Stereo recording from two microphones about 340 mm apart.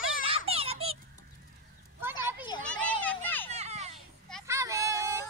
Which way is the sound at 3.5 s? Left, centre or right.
Centre.